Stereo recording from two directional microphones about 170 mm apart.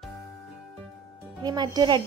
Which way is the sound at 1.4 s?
25° right (ahead or behind).